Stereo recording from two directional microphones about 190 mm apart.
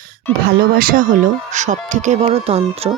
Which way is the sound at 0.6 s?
50° right (ahead or behind).